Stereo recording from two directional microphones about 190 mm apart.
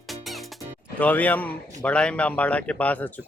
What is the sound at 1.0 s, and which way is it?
A man's voice, 10° left (ahead or behind).